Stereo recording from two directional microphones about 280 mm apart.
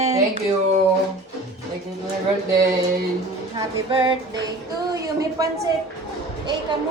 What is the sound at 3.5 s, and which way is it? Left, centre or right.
Music, centre.